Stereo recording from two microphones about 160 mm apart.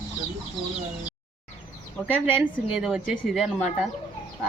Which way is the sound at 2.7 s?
5° right (ahead or behind).